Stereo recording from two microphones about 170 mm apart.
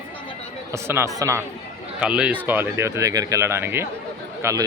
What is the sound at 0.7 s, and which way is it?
A man's voice, 15° right (ahead or behind).